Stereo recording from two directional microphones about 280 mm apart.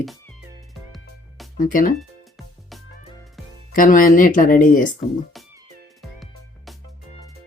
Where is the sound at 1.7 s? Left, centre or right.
Left.